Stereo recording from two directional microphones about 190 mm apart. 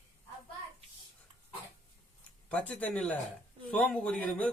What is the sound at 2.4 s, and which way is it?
Speech, 5° left (ahead or behind).